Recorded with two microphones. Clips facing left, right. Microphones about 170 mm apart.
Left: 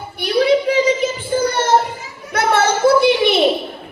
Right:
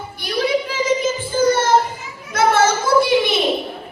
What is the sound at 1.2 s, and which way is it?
Child singing, 60° left (ahead or behind).